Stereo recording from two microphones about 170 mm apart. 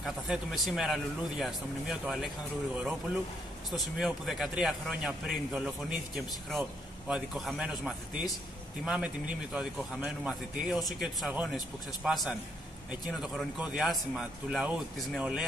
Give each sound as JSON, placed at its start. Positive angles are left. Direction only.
{"t": 0.0, "sound": "speech", "side_deg": 0}
{"t": 3.7, "sound": "speech", "side_deg": 0}